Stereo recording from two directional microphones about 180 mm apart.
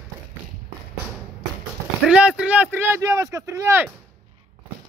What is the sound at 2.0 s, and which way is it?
Speech, 5° right (ahead or behind).